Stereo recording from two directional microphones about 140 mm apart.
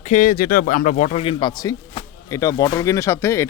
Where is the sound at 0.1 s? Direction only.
75° left (ahead or behind).